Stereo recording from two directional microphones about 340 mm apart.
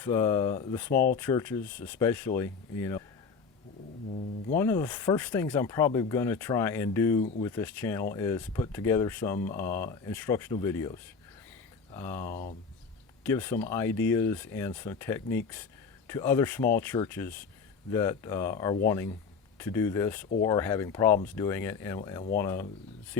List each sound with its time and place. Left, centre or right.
0.0 s speech: centre
4.5 s speech: centre
12.3 s speech: left
13.2 s speech: centre